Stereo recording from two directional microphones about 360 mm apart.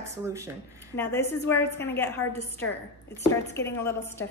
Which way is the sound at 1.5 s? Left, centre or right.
Centre.